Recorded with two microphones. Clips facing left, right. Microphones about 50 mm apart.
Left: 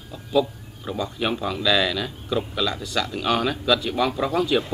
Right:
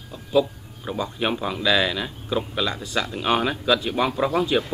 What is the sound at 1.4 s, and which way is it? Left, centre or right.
Speech, centre.